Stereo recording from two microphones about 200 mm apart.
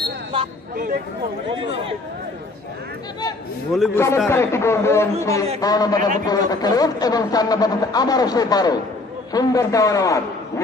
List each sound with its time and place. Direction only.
3.9 s a man's voice: 15° left (ahead or behind)
5.9 s a man's voice: 40° right (ahead or behind)
6.2 s a man's voice: 20° left (ahead or behind)